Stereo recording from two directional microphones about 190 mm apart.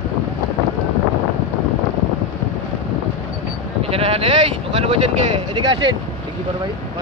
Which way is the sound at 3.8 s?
30° right (ahead or behind).